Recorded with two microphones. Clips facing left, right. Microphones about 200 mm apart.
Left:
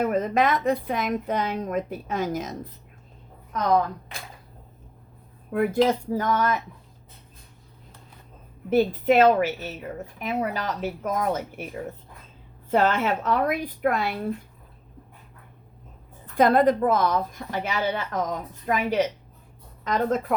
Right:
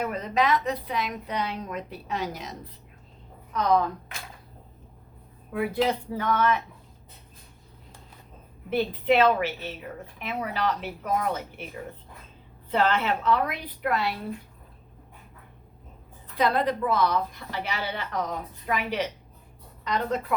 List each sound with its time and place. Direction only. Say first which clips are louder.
0.0 s a woman's voice: left 4 dB; 50° left (ahead or behind)
5.5 s a woman's voice: left 4 dB; 45° left (ahead or behind)
8.7 s a woman's voice: left 4 dB; 45° left (ahead or behind)
12.7 s a woman's voice: left 3 dB; 45° left (ahead or behind)
16.2 s a woman's voice: left 6 dB; 50° left (ahead or behind)